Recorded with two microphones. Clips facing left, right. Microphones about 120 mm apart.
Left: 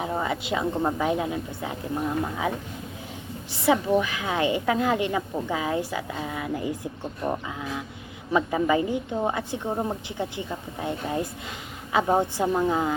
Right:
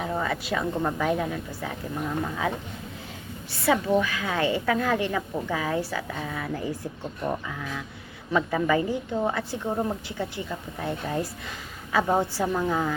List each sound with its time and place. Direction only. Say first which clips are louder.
0.0 s a woman's voice: left 1 dB; 20° left (ahead or behind)
3.6 s a woman's voice: left 1 dB; 15° left (ahead or behind)